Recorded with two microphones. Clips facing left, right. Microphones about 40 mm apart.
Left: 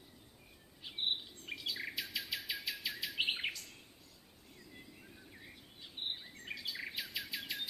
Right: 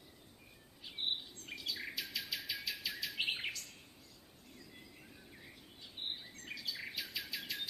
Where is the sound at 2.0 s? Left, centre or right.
Left.